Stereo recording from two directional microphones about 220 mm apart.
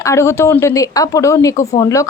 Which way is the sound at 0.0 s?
15° left (ahead or behind).